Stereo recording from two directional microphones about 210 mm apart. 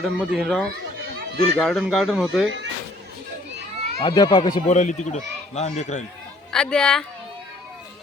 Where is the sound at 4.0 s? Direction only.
20° left (ahead or behind).